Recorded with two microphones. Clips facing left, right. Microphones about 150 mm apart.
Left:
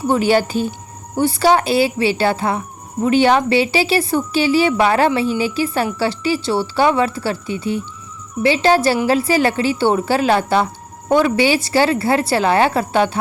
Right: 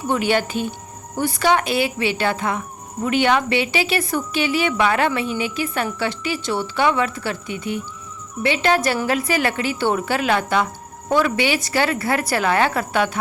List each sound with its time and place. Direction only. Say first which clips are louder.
0.1 s a woman's voice: left 4 dB; 35° left (ahead or behind)